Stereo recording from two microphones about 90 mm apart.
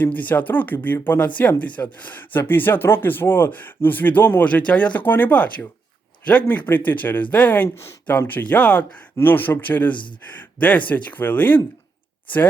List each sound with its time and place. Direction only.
0.0 s speech: 20° left (ahead or behind)